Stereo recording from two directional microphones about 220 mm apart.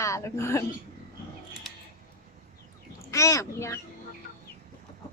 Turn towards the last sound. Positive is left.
turn(degrees=15)  # may be behind; listen again after turning